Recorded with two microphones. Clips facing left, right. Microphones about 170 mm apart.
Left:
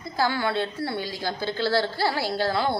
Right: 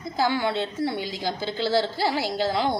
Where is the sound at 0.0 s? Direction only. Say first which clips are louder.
Right 1 dB; 20° right (ahead or behind).